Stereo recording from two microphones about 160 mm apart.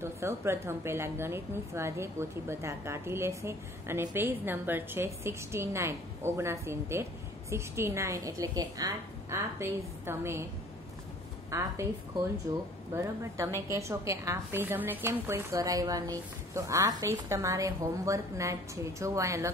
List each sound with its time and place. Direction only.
0.0 s a woman's voice: 15° right (ahead or behind)
11.5 s a woman's voice: 20° right (ahead or behind)
12.9 s a woman's voice: 15° right (ahead or behind)